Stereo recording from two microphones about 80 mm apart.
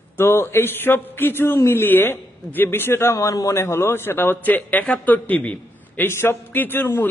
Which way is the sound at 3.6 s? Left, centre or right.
Left.